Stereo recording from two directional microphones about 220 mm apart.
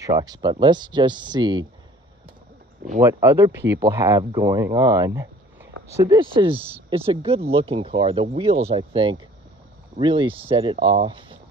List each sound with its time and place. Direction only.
0.0 s speech: 15° right (ahead or behind)
3.0 s speech: 10° right (ahead or behind)